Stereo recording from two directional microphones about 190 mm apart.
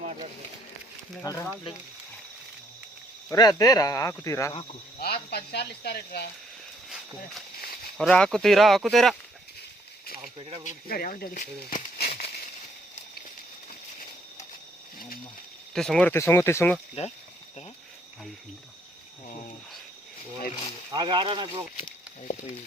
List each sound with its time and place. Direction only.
1.2 s speech: 20° left (ahead or behind)
3.2 s speech: 20° left (ahead or behind)
4.9 s speech: 55° left (ahead or behind)
7.9 s speech: 5° left (ahead or behind)
10.3 s speech: 30° right (ahead or behind)
10.8 s speech: 50° left (ahead or behind)
11.9 s a sound: 50° left (ahead or behind)
15.7 s speech: centre (ahead or behind)
17.0 s speech: 35° left (ahead or behind)
20.9 s speech: 25° right (ahead or behind)